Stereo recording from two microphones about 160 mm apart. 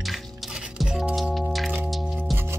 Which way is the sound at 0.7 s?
5° right (ahead or behind).